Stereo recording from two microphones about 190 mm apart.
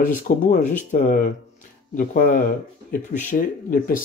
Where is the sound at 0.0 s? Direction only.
45° left (ahead or behind).